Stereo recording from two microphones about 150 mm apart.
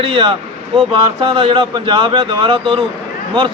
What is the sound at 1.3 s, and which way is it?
Speech, 35° right (ahead or behind).